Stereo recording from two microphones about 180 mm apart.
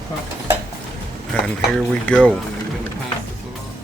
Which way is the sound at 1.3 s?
5° left (ahead or behind).